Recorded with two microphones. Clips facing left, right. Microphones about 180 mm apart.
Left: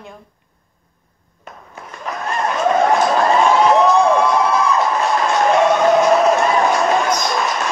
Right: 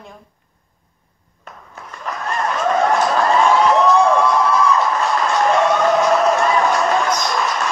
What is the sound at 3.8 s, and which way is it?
Crowd, 20° left (ahead or behind).